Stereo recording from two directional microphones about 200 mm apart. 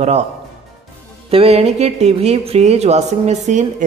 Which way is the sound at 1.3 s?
30° right (ahead or behind).